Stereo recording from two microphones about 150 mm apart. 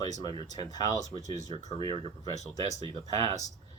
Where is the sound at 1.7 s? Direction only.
35° right (ahead or behind).